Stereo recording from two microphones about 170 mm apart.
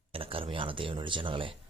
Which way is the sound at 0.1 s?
35° right (ahead or behind).